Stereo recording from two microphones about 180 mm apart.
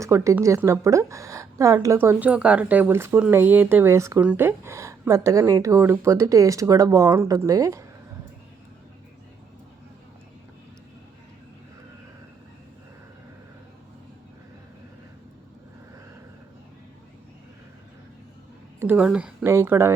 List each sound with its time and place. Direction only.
0.0 s a woman's voice: 15° right (ahead or behind)
18.8 s a woman's voice: 10° right (ahead or behind)